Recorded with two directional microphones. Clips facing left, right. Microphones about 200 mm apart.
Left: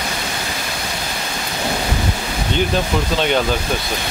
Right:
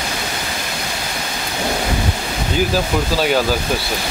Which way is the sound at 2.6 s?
5° right (ahead or behind).